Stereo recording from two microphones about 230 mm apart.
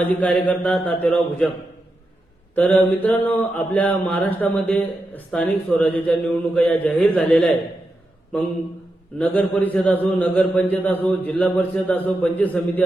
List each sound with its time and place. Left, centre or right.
0.0 s speech: centre
2.6 s speech: centre
9.1 s speech: centre